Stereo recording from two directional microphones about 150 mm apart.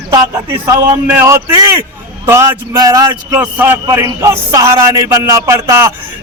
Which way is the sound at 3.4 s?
10° right (ahead or behind).